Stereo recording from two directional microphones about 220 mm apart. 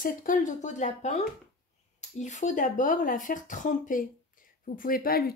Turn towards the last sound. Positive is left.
turn(degrees=45)  # may be behind; listen again after turning